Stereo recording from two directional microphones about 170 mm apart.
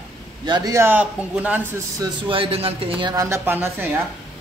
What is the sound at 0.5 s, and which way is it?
A man's voice, 20° right (ahead or behind).